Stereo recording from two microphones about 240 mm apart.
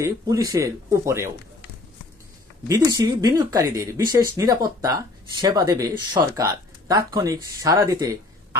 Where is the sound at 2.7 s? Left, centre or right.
Centre.